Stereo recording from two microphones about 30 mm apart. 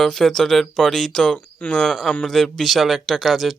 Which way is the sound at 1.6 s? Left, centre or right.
Left.